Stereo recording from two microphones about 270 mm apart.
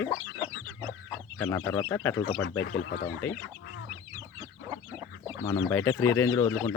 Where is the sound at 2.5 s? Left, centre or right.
Left.